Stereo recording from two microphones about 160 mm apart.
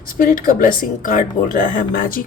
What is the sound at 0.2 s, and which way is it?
A woman's voice, 60° left (ahead or behind).